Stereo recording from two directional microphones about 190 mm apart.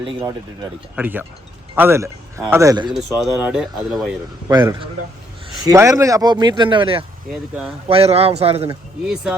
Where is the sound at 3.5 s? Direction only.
Centre (ahead or behind).